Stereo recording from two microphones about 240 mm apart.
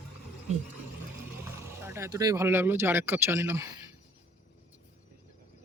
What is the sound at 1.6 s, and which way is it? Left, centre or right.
Speech, centre.